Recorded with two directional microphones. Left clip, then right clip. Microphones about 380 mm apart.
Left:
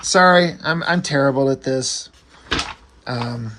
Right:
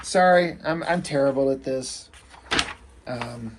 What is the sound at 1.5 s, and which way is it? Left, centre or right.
Speech, left.